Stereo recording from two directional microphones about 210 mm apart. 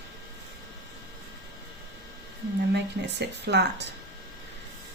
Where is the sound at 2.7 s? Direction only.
55° right (ahead or behind).